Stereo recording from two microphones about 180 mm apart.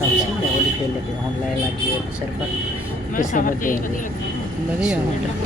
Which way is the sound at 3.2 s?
45° left (ahead or behind).